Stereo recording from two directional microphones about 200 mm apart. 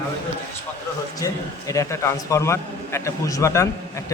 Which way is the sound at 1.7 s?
15° left (ahead or behind).